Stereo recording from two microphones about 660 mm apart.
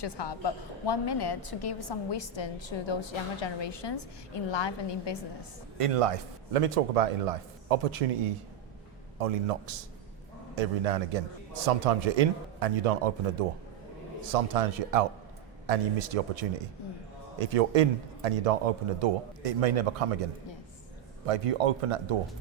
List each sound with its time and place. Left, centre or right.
0.0 s a woman's voice: left
5.7 s a man's voice: right
14.3 s a man's voice: right
21.2 s speech: right